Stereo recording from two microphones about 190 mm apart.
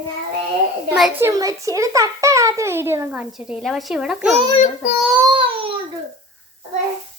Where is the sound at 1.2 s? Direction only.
20° right (ahead or behind).